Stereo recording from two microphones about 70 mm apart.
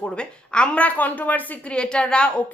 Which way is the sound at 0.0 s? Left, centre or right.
Centre.